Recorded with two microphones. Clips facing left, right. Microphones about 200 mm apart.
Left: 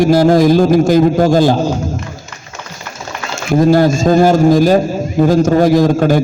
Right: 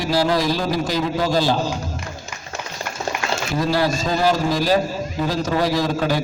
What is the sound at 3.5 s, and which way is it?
A man's voice, 50° left (ahead or behind).